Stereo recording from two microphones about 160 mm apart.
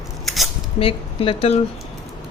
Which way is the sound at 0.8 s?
35° left (ahead or behind).